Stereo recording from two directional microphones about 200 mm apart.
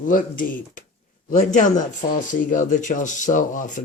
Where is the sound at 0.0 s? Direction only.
45° left (ahead or behind).